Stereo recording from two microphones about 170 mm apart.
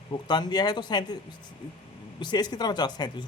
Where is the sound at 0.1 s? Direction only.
25° left (ahead or behind).